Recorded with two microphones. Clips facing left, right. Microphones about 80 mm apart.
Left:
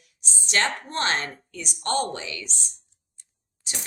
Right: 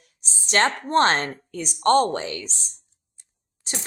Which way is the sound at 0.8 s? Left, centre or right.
Right.